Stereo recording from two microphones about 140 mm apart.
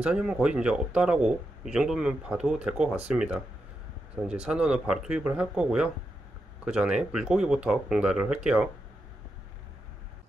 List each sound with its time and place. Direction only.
0.0 s speech: 5° right (ahead or behind)